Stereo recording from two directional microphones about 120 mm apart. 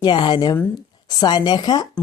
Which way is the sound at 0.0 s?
40° left (ahead or behind).